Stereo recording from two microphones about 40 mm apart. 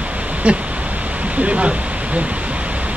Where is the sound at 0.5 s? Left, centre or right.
Right.